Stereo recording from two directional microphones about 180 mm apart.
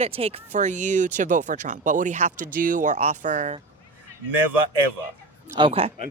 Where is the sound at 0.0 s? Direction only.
35° right (ahead or behind).